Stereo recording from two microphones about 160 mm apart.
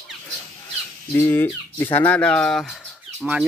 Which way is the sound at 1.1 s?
15° left (ahead or behind).